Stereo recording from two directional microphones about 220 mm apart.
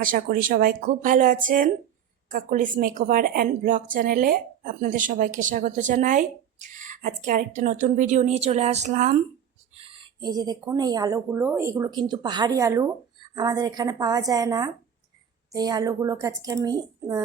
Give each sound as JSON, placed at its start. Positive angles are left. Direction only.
{"t": 0.0, "sound": "a woman's voice", "side_deg": -40}